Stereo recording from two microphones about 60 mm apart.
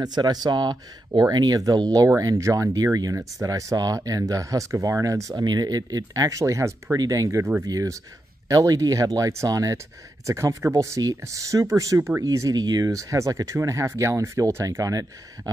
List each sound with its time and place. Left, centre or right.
1.2 s speech: right
2.0 s speech: right
7.6 s speech: right
9.5 s speech: right
10.2 s speech: right
14.8 s speech: right